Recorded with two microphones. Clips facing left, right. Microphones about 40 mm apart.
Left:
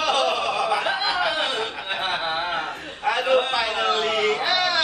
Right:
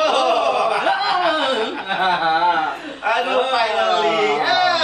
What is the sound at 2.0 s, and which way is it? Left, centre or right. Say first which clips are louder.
Speech: right 9 dB; right.